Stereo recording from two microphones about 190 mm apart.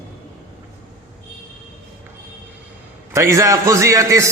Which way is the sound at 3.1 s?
15° right (ahead or behind).